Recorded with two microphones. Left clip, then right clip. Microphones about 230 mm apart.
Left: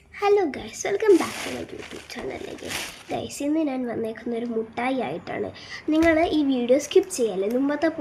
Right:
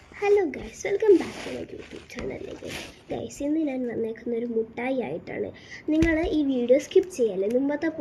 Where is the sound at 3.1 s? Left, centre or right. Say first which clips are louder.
Left 2 dB; centre.